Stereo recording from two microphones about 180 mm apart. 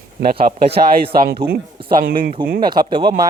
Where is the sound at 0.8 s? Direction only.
60° right (ahead or behind).